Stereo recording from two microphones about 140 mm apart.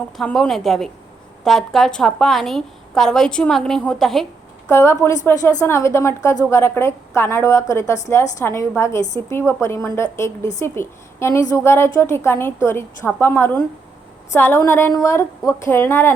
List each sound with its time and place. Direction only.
0.2 s a woman's voice: centre (ahead or behind)
4.7 s a woman's voice: 20° left (ahead or behind)